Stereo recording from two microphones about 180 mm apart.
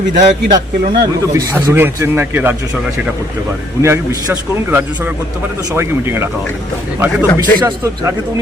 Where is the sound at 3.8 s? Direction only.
15° right (ahead or behind).